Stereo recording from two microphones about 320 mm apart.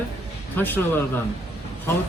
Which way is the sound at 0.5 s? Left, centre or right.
Centre.